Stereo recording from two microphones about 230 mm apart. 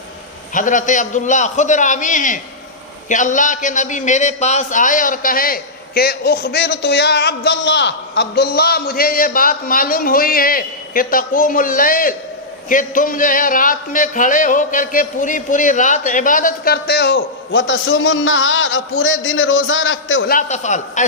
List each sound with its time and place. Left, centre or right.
0.5 s a man's voice: left
20.2 s a man's voice: left